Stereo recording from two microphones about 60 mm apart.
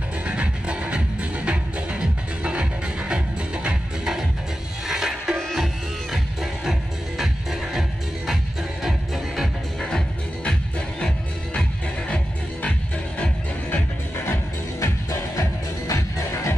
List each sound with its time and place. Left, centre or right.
0.3 s music: centre
8.8 s music: centre
9.8 s music: centre
13.7 s music: left
14.8 s music: left